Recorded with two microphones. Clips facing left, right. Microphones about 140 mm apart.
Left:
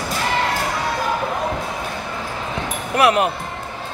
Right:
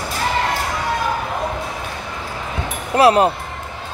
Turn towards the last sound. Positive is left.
turn(degrees=-30)  # may be behind; listen again after turning